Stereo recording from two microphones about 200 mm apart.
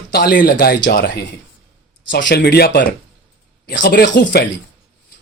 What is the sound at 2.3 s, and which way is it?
Speech, 50° left (ahead or behind).